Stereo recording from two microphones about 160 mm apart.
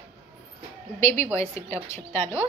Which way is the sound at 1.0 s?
15° left (ahead or behind).